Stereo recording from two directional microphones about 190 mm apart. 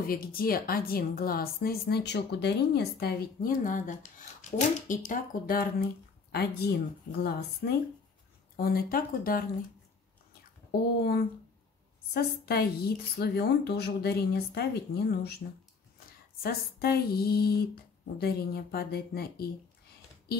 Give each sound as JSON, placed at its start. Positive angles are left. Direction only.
{"t": 0.0, "sound": "a woman's voice", "side_deg": 50}
{"t": 10.7, "sound": "speech", "side_deg": 55}
{"t": 12.1, "sound": "a woman's voice", "side_deg": 55}
{"t": 16.4, "sound": "a woman's voice", "side_deg": 55}